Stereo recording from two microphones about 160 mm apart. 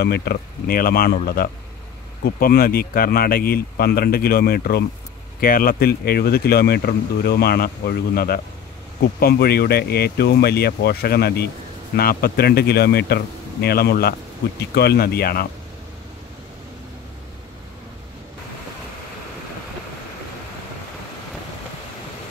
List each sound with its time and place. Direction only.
0.0 s speech: 80° left
12.0 s speech: 70° left (ahead or behind)
14.6 s speech: 90° left; by 15.4 s 70° left (ahead or behind)